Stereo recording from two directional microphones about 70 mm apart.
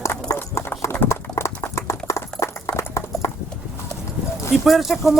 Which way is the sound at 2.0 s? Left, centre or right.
Left.